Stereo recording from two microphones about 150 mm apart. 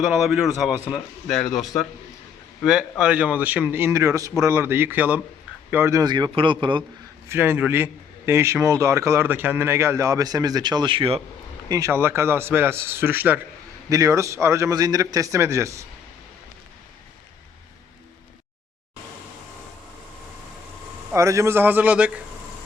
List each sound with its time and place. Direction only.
0.0 s a man's voice: centre (ahead or behind)
1.5 s a man's voice: 25° left (ahead or behind)
3.0 s a man's voice: 10° right (ahead or behind); by 6.8 s 30° right (ahead or behind)
7.3 s a man's voice: 15° right (ahead or behind); by 11.2 s 35° right (ahead or behind)
11.7 s a man's voice: 20° right (ahead or behind)
21.1 s a man's voice: 20° right (ahead or behind)